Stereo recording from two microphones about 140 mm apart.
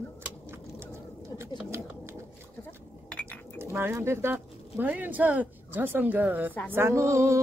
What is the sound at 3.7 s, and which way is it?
Speech, 15° right (ahead or behind).